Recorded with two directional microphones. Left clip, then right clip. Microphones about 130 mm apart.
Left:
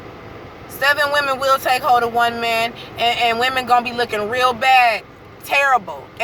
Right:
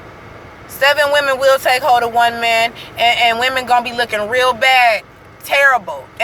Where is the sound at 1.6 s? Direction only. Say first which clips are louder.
Right 3 dB; 15° left (ahead or behind).